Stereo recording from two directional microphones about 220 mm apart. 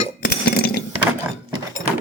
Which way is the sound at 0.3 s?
45° left (ahead or behind).